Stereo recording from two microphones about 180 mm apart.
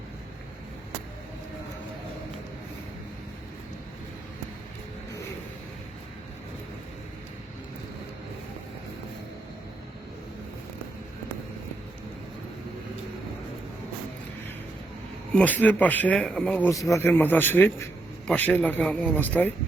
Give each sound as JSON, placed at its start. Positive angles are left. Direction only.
{"t": 15.3, "sound": "speech", "side_deg": 5}
{"t": 16.6, "sound": "speech", "side_deg": 15}